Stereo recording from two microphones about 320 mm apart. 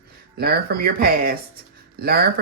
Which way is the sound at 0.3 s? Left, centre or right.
Right.